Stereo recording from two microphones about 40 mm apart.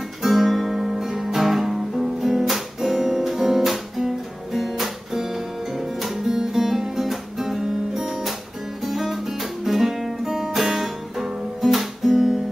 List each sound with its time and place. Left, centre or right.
0.2 s guitar: centre
10.8 s music: centre